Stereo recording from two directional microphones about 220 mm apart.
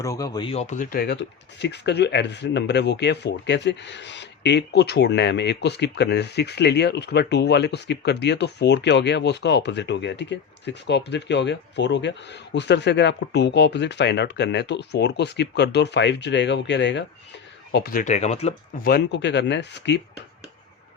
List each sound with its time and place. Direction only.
0.0 s speech: 15° left (ahead or behind); by 18.9 s 30° left (ahead or behind)
18.9 s speech: 50° left (ahead or behind)